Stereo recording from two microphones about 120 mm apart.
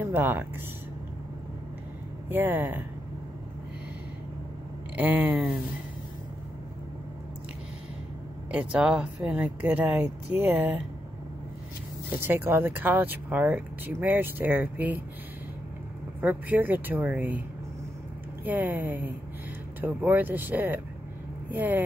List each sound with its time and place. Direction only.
0.0 s speech: 15° right (ahead or behind)
2.2 s speech: 15° right (ahead or behind)
4.9 s speech: 15° right (ahead or behind)
8.5 s speech: 10° right (ahead or behind)
12.2 s speech: 20° right (ahead or behind)
16.2 s speech: 15° right (ahead or behind)
18.4 s speech: 15° right (ahead or behind)